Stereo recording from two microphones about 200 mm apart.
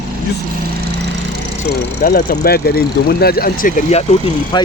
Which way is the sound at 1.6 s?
50° left (ahead or behind).